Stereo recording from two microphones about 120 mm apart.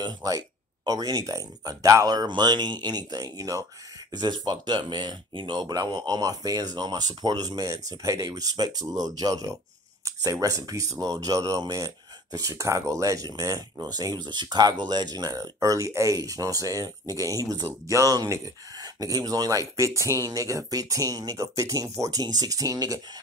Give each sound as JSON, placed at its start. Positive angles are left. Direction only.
{"t": 0.0, "sound": "speech", "side_deg": -35}